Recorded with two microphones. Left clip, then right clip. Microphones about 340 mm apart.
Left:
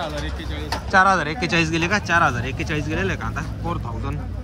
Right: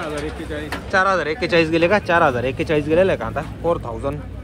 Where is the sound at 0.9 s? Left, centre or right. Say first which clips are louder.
Left 1 dB; centre.